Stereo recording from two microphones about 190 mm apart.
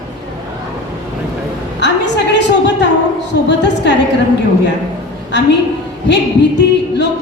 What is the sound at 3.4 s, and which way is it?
Speech, 65° left (ahead or behind).